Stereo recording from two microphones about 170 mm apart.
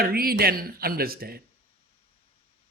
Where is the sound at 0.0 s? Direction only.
60° right (ahead or behind).